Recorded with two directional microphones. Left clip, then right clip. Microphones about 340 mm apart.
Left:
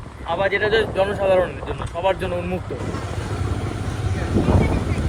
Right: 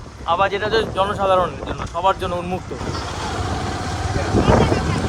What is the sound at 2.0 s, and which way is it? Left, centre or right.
Speech, centre.